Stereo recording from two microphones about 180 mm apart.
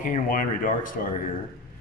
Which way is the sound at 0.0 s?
45° left (ahead or behind).